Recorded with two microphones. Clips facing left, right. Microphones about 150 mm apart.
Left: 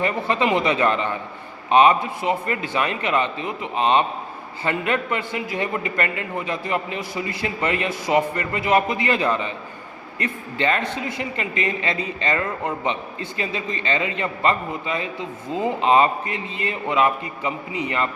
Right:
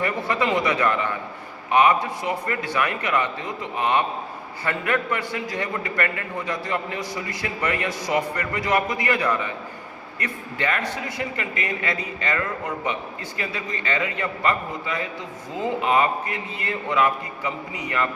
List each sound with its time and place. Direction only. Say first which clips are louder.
0.0 s a man's voice: left 2 dB; 25° left (ahead or behind)